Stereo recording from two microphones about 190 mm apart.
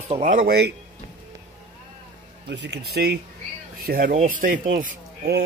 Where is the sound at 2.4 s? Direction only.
65° right (ahead or behind).